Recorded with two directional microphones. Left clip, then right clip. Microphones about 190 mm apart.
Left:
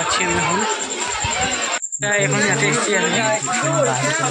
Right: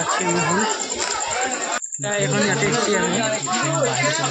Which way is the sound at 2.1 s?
10° right (ahead or behind).